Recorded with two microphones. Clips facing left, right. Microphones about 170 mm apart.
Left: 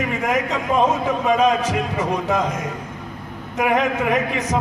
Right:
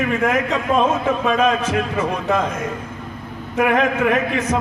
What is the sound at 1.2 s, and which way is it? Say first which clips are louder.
Speech: left 3 dB; 15° left (ahead or behind).